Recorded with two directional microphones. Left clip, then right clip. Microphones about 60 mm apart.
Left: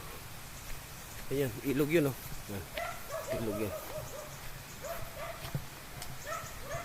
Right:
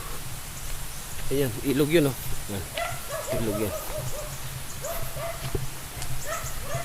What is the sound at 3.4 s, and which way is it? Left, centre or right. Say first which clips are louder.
Speech: right 7 dB; centre.